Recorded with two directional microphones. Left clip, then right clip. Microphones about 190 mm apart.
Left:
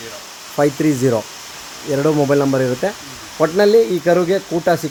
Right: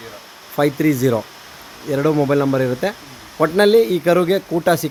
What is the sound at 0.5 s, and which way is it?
Speech, 15° right (ahead or behind).